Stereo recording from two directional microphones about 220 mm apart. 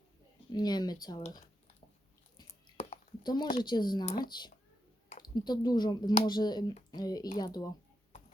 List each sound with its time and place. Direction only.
0.5 s speech: 20° left (ahead or behind)
2.6 s a sound: 20° left (ahead or behind)
3.6 s speech: 20° left (ahead or behind)